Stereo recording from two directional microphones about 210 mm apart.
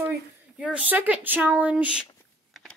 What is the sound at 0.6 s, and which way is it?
A woman's voice, 5° right (ahead or behind).